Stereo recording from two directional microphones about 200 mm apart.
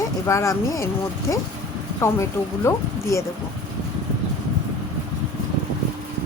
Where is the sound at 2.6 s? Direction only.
15° left (ahead or behind).